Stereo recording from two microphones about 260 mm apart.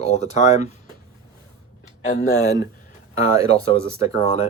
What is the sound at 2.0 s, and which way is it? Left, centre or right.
Speech, left.